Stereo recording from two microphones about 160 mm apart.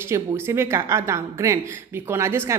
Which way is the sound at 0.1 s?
15° right (ahead or behind).